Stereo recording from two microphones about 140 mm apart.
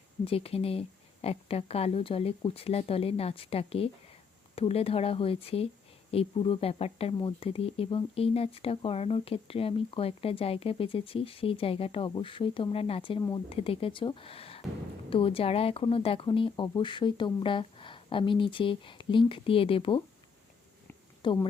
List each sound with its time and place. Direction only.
0.3 s speech: 45° left (ahead or behind)
21.2 s speech: 35° left (ahead or behind)